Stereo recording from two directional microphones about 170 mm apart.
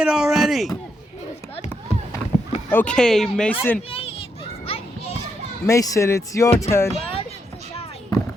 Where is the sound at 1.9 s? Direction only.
40° left (ahead or behind).